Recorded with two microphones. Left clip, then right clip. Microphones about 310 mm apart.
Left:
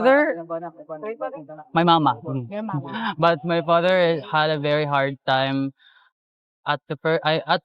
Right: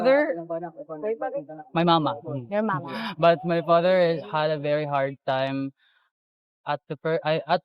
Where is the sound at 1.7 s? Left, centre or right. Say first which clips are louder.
Left 4 dB; left.